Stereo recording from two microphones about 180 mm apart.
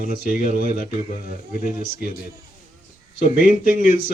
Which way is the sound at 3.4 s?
50° left (ahead or behind).